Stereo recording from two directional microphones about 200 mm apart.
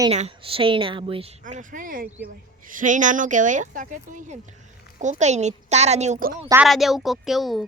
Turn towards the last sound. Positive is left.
turn(degrees=0)  # may be behind; listen again after turning